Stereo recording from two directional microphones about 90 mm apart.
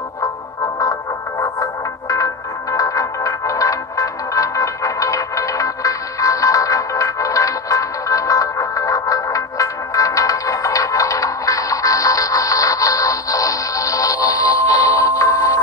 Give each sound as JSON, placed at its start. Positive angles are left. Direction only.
{"t": 1.4, "sound": "music", "side_deg": 40}